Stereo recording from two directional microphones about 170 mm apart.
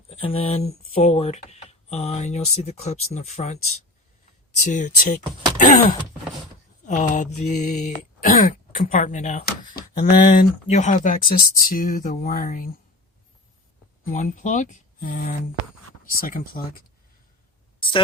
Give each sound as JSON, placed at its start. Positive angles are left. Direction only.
{"t": 0.1, "sound": "speech", "side_deg": 35}
{"t": 4.7, "sound": "mantra", "side_deg": 50}
{"t": 6.8, "sound": "mantra", "side_deg": 45}
{"t": 9.5, "sound": "speech", "side_deg": 65}
{"t": 10.2, "sound": "mantra", "side_deg": 45}
{"t": 14.1, "sound": "mantra", "side_deg": 50}
{"t": 16.0, "sound": "speech", "side_deg": 55}
{"t": 17.7, "sound": "a sound", "side_deg": 30}